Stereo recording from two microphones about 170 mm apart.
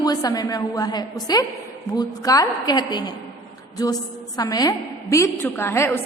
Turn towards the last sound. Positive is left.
turn(degrees=15)  # may be behind; listen again after turning